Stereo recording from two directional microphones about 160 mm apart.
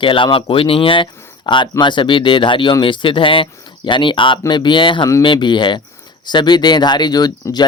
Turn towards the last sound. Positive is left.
turn(degrees=25)  # may be behind; listen again after turning